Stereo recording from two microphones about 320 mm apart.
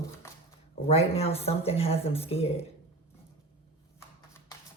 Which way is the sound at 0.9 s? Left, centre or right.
Centre.